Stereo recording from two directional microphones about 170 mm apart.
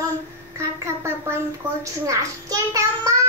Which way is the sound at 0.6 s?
15° right (ahead or behind).